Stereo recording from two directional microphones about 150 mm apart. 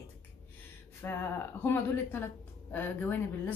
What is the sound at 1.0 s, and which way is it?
Speech, 15° left (ahead or behind).